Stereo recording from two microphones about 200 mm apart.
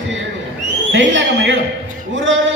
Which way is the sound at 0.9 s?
65° right (ahead or behind).